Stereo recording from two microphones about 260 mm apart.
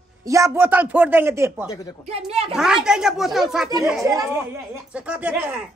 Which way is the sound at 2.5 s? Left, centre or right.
Centre.